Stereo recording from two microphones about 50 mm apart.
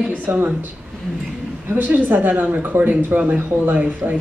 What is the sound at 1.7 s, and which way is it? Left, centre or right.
Speech, right.